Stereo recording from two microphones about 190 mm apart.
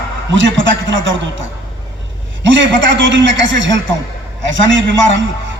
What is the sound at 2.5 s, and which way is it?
A man's voice, 75° right (ahead or behind).